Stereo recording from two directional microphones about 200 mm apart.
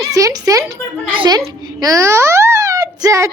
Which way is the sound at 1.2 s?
20° right (ahead or behind).